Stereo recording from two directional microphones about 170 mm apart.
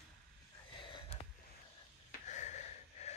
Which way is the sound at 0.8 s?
35° left (ahead or behind).